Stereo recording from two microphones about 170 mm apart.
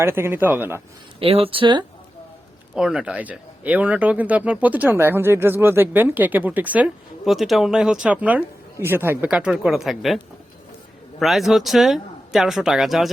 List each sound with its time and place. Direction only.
0.0 s speech: 15° right (ahead or behind)
1.2 s speech: 35° right (ahead or behind)
2.7 s speech: 5° right (ahead or behind)
11.2 s speech: centre (ahead or behind)